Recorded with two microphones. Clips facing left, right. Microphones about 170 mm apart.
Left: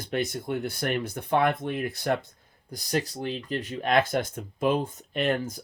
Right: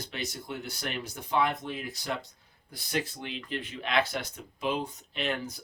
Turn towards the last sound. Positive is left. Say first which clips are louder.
# left 6 dB
turn(degrees=50)  # may be behind; listen again after turning